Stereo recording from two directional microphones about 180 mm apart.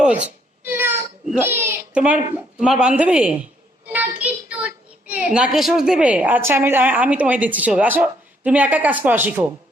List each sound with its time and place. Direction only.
0.6 s a child's voice: 10° right (ahead or behind)